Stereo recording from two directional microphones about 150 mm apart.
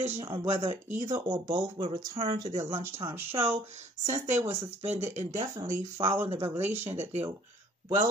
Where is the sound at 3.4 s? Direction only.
45° right (ahead or behind).